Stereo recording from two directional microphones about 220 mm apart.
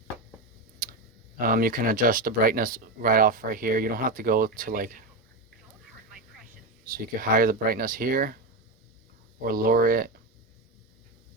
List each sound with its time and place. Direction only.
0.8 s tick: 40° right (ahead or behind)
1.4 s speech: 40° right (ahead or behind)
6.8 s speech: 40° right (ahead or behind)
9.4 s speech: 40° right (ahead or behind)